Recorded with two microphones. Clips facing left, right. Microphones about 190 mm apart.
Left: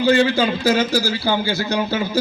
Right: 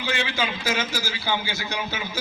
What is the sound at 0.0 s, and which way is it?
A man's voice, 40° left (ahead or behind).